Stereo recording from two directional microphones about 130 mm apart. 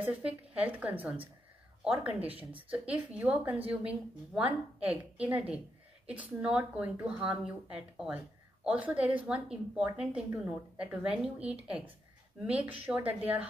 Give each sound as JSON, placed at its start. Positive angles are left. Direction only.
{"t": 0.0, "sound": "a woman's voice", "side_deg": -10}
{"t": 2.2, "sound": "speech", "side_deg": -45}
{"t": 3.0, "sound": "a woman's voice", "side_deg": -10}